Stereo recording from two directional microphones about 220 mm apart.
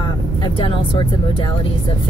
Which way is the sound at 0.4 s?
20° left (ahead or behind).